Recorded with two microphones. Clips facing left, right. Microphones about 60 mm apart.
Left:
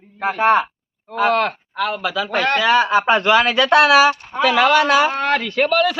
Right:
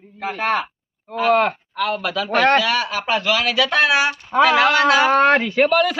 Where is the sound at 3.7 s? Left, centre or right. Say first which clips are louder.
Left 8 dB; left.